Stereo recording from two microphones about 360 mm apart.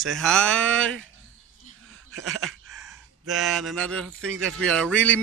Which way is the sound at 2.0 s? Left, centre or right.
Right.